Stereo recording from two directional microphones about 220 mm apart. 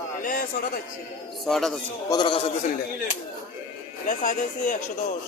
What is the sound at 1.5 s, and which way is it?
Speech, centre (ahead or behind).